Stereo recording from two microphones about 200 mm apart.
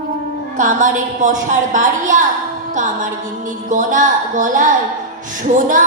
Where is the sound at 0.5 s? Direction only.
40° right (ahead or behind).